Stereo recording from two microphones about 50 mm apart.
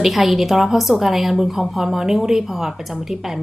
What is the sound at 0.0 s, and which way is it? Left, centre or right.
A woman's voice, centre.